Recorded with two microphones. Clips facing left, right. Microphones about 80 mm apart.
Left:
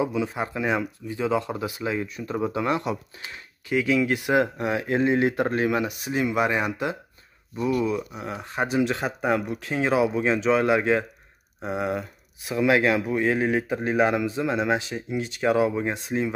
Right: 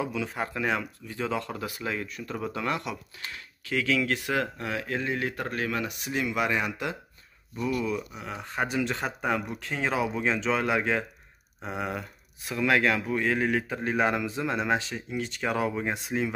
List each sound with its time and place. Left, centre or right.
0.0 s speech: left
8.3 s speech: centre
15.9 s speech: centre